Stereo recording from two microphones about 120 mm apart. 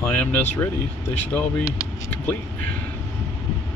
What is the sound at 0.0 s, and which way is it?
Speech, 15° left (ahead or behind).